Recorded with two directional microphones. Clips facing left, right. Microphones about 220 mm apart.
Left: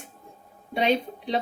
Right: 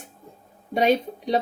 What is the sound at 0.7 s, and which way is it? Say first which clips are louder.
Speech: right 3 dB; 40° right (ahead or behind).